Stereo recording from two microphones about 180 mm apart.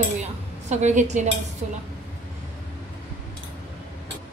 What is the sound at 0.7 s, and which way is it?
A woman's voice, 40° right (ahead or behind).